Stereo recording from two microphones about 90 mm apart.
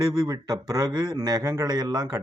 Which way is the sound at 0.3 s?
45° right (ahead or behind).